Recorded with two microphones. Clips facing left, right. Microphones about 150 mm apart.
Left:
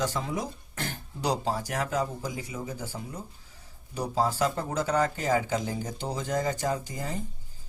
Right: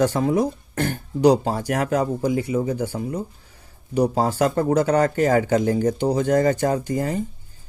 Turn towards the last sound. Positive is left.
turn(degrees=-65)  # may be behind; listen again after turning